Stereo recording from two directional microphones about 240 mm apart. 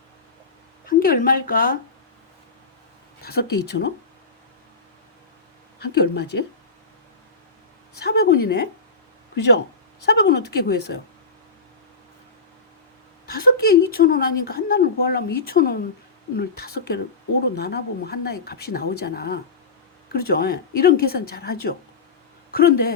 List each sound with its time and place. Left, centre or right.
0.9 s a woman's voice: left
3.2 s a sound: left
3.6 s speech: left
5.8 s speech: left
7.9 s speech: left
13.2 s a woman's voice: left